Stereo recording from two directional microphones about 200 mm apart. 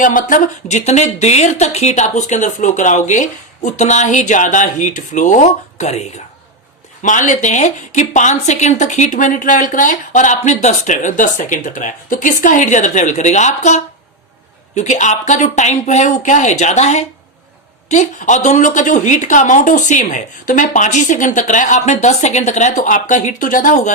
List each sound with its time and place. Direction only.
0.0 s speech: 40° left (ahead or behind)